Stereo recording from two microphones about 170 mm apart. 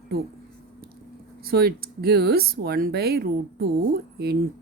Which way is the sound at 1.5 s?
65° right (ahead or behind).